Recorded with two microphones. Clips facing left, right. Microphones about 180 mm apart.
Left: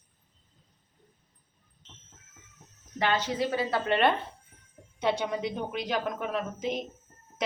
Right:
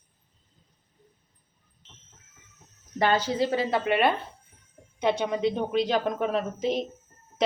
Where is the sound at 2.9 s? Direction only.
40° right (ahead or behind).